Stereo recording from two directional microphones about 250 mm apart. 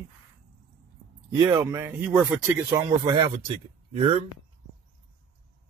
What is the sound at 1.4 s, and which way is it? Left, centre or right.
Speech, centre.